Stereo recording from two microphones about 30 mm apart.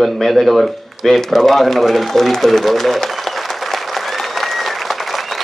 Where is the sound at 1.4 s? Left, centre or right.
Centre.